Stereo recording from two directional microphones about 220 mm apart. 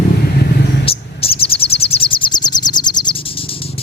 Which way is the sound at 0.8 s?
25° left (ahead or behind).